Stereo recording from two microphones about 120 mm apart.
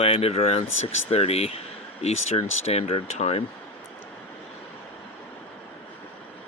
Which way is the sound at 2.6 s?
60° left (ahead or behind).